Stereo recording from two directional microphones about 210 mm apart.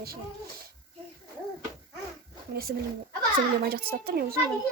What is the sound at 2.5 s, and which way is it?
Speech, 45° right (ahead or behind).